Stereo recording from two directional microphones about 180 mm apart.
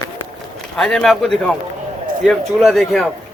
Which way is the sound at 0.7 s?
5° left (ahead or behind).